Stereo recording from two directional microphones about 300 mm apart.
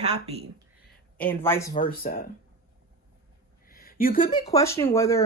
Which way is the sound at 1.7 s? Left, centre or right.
Left.